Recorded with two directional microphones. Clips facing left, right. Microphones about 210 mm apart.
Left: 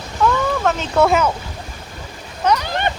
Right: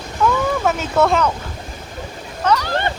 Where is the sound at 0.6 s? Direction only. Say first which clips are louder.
Left 2 dB; 10° right (ahead or behind).